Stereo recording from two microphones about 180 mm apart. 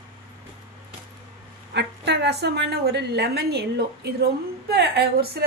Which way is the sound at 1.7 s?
70° right (ahead or behind).